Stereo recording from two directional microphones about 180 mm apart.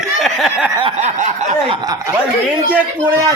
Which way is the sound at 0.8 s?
35° right (ahead or behind).